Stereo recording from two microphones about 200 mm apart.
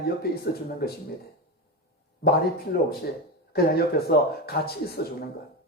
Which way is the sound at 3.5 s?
50° left (ahead or behind).